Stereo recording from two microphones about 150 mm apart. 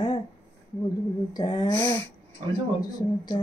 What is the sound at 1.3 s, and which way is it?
A woman's voice, 25° left (ahead or behind).